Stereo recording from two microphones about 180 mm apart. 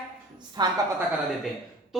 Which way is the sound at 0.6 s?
25° right (ahead or behind).